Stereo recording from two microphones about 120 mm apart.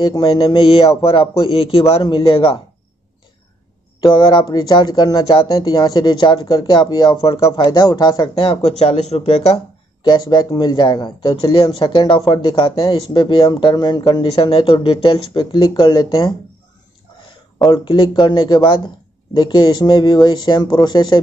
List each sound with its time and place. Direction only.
0.0 s speech: 45° left (ahead or behind)
4.1 s speech: 40° left (ahead or behind); by 9.6 s 55° left (ahead or behind)
10.0 s speech: 40° left (ahead or behind)
14.2 s speech: 50° left (ahead or behind)
17.6 s speech: 45° left (ahead or behind)